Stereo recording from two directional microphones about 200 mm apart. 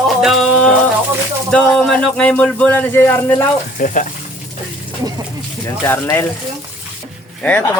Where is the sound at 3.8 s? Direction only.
40° left (ahead or behind).